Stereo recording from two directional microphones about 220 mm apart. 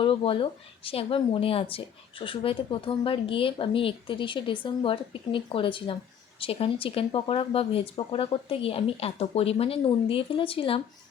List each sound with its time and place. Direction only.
0.0 s speech: 25° left (ahead or behind)